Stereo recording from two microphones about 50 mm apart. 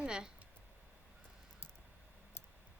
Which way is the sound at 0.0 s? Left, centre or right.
Centre.